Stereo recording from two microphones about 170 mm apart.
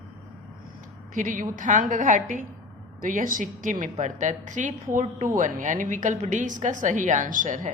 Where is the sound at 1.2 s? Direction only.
50° right (ahead or behind).